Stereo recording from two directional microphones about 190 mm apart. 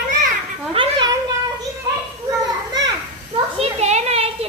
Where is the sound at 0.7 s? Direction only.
25° right (ahead or behind).